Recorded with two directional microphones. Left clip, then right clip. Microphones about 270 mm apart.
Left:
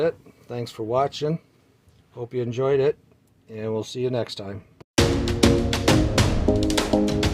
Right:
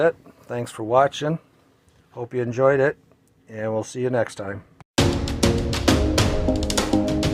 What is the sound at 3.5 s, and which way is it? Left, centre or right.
Music, centre.